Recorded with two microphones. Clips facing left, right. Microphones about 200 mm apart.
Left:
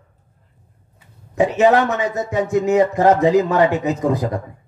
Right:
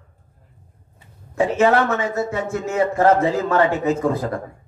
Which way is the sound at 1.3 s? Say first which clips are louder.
Left 2 dB; 20° left (ahead or behind).